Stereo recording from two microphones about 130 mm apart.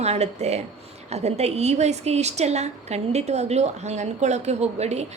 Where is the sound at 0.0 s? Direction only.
55° right (ahead or behind).